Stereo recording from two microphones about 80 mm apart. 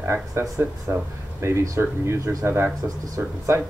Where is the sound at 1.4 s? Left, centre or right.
Right.